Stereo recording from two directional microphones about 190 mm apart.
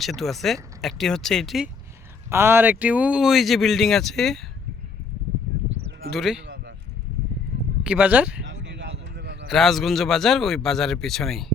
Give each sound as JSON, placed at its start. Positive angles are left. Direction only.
{"t": 0.0, "sound": "a man's voice", "side_deg": 0}
{"t": 2.3, "sound": "a man's voice", "side_deg": -10}
{"t": 6.1, "sound": "a man's voice", "side_deg": 0}
{"t": 7.9, "sound": "speech", "side_deg": -10}
{"t": 8.4, "sound": "a sound", "side_deg": -75}
{"t": 9.5, "sound": "a man's voice", "side_deg": 0}